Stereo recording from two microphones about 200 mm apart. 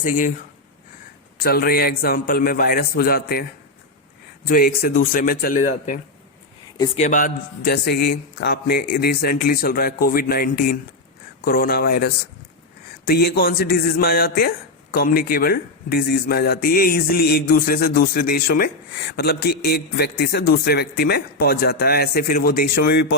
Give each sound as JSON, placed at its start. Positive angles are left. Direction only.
{"t": 0.0, "sound": "speech", "side_deg": 40}
{"t": 1.4, "sound": "a man's voice", "side_deg": 50}
{"t": 4.4, "sound": "a man's voice", "side_deg": 45}
{"t": 6.7, "sound": "a man's voice", "side_deg": 20}
{"t": 7.0, "sound": "a man's voice", "side_deg": 40}